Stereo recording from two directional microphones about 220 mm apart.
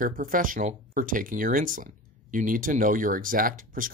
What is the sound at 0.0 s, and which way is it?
Speech, 40° right (ahead or behind).